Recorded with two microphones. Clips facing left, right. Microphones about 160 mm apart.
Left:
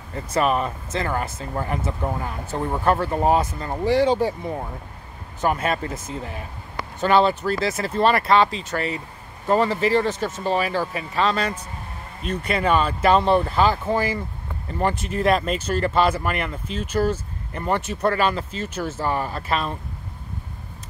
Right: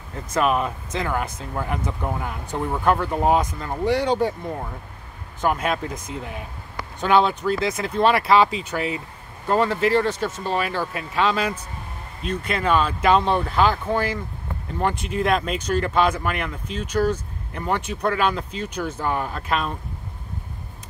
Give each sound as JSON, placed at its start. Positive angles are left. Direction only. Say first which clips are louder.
{"t": 0.3, "sound": "speech", "louder": "even", "side_deg": 0}